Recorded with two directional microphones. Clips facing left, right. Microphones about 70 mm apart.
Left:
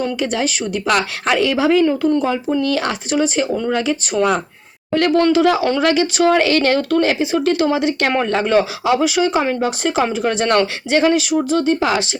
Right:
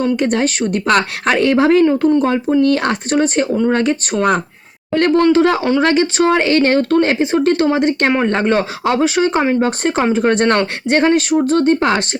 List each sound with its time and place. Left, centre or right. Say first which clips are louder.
0.2 s a woman's voice: right 4 dB; right
1.8 s speech: right 3 dB; right
2.6 s a woman's voice: right 5 dB; right